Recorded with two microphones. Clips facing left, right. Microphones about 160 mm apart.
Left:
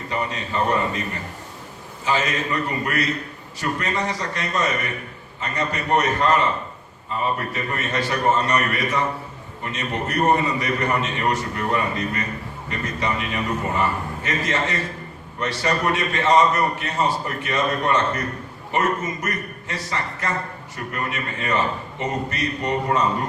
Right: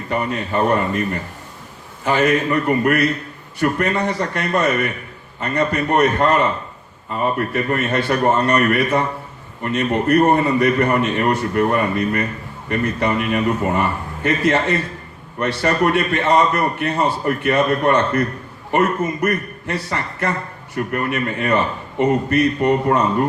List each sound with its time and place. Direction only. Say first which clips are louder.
0.1 s a man's voice: right 6 dB; 55° right (ahead or behind)
2.0 s a man's voice: right 7 dB; 60° right (ahead or behind)